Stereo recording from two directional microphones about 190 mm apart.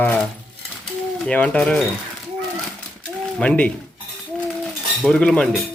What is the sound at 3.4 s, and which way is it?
Speech, 5° left (ahead or behind).